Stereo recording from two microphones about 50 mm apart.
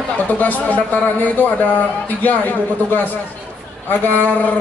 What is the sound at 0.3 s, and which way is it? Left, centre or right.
A man's voice, left.